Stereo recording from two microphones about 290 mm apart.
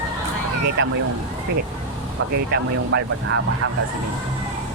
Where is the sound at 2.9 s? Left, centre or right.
Right.